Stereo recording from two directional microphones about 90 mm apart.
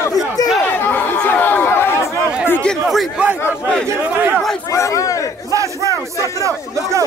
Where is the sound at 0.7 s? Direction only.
20° left (ahead or behind).